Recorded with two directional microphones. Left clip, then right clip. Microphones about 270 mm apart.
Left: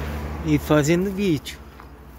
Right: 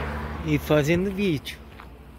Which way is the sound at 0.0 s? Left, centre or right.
Centre.